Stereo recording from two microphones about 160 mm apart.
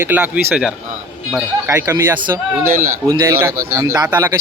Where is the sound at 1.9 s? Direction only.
15° right (ahead or behind).